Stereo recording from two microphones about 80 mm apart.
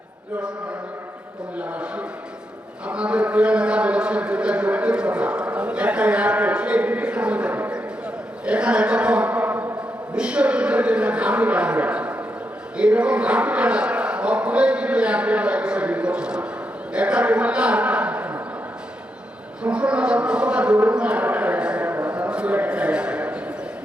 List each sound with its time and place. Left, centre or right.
1.5 s a man's voice: centre
19.6 s a man's voice: centre